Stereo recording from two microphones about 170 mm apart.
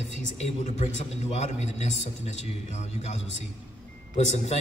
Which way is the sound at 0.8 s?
40° left (ahead or behind).